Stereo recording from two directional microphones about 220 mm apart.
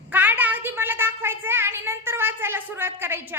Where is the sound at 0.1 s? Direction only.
10° right (ahead or behind).